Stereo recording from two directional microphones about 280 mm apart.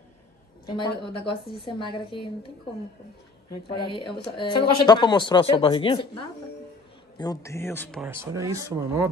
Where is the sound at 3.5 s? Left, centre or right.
Centre.